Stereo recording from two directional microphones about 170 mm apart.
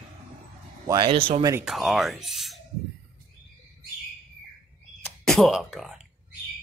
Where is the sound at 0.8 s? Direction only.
30° right (ahead or behind).